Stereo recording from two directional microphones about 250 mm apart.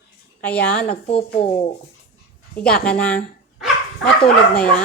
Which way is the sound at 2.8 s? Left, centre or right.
Centre.